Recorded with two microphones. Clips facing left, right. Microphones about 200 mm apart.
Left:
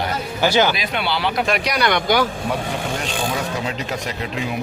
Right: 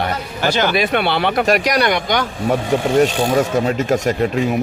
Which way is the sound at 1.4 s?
45° right (ahead or behind).